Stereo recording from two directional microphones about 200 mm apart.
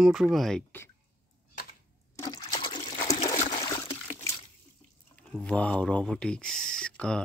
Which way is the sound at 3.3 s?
20° left (ahead or behind).